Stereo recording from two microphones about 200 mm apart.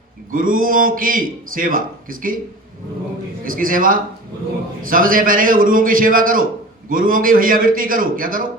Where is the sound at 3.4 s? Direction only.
45° right (ahead or behind).